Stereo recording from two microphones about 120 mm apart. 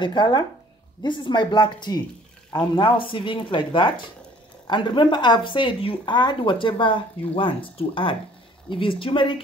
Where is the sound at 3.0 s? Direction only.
45° left (ahead or behind).